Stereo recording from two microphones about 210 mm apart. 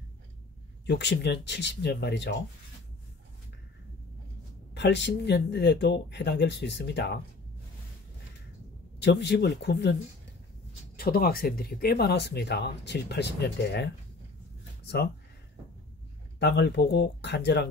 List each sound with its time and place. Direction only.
0.8 s speech: 55° left (ahead or behind)
4.7 s speech: 55° left (ahead or behind)
9.0 s speech: 55° left (ahead or behind)
11.0 s speech: 45° left (ahead or behind)
16.3 s speech: 55° left (ahead or behind)